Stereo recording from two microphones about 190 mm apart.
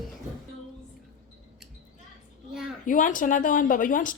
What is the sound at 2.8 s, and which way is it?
Speech, 45° left (ahead or behind).